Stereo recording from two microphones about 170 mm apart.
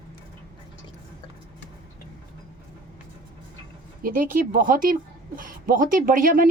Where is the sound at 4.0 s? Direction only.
55° right (ahead or behind).